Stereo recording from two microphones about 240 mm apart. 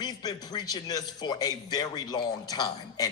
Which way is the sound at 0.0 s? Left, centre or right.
Centre.